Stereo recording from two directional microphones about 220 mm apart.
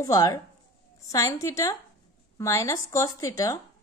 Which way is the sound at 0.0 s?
15° left (ahead or behind).